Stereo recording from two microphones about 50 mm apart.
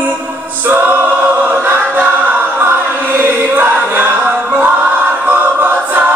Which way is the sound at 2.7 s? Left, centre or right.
Right.